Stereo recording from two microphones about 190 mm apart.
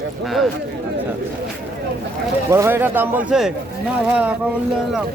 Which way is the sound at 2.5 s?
10° right (ahead or behind).